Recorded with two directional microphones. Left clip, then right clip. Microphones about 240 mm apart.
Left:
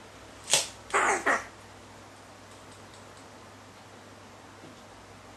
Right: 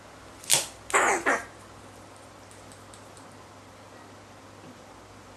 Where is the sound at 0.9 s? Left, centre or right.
Centre.